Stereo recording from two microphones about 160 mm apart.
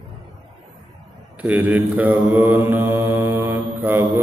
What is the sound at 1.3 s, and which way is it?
Mantra, 10° right (ahead or behind).